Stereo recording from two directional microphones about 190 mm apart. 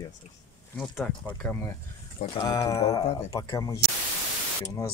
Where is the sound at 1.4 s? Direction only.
10° left (ahead or behind).